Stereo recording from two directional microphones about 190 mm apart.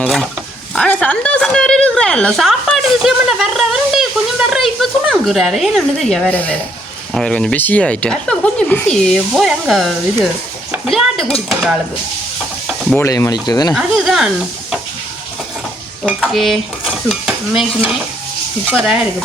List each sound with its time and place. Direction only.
0.0 s a sound: centre (ahead or behind)
7.1 s speech: 5° left (ahead or behind)
10.7 s dishes: centre (ahead or behind)
12.6 s stir: centre (ahead or behind)
13.0 s speech: 15° left (ahead or behind)
13.7 s speech: centre (ahead or behind)
16.0 s stir: centre (ahead or behind)
18.7 s speech: 5° right (ahead or behind)